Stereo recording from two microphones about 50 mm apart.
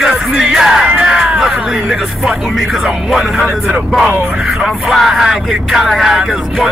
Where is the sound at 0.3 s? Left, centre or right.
Centre.